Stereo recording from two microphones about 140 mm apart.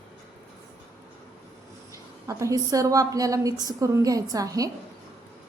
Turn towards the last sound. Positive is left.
turn(degrees=-25)  # may be behind; listen again after turning